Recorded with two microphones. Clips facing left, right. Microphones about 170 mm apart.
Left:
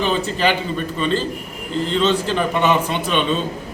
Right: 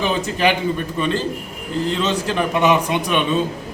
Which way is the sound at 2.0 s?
10° right (ahead or behind).